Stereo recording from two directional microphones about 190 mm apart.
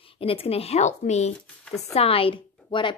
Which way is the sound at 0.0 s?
30° left (ahead or behind).